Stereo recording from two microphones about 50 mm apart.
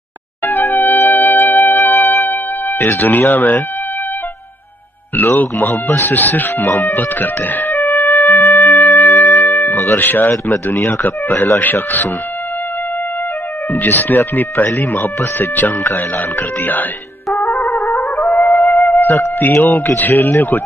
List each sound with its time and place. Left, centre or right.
0.5 s music: left
2.8 s speech: left
5.4 s speech: left
7.7 s music: left
8.6 s music: left
9.9 s speech: left
13.7 s speech: left
17.3 s music: left
18.9 s speech: left